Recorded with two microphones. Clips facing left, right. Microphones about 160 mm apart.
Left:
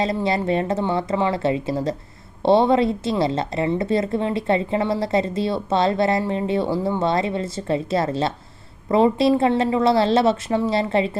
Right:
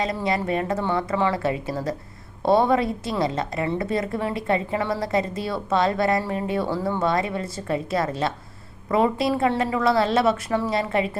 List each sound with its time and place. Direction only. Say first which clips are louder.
0.0 s a woman's voice: left 3 dB; 25° left (ahead or behind)